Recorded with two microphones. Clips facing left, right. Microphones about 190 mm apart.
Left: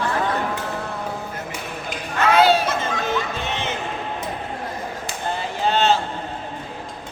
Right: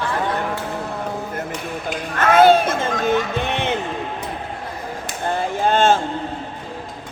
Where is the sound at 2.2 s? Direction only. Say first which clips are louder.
Right 4 dB; 50° right (ahead or behind).